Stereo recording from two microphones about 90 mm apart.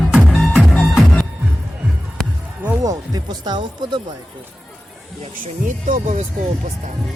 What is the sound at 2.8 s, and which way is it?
Music, 45° right (ahead or behind).